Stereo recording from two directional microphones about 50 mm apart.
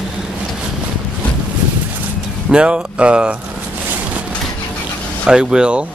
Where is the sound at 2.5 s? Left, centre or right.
Right.